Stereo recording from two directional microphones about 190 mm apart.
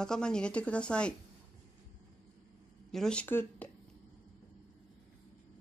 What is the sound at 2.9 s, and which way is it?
Speech, 5° left (ahead or behind).